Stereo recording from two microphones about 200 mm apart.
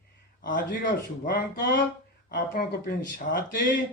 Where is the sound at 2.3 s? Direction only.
50° left (ahead or behind).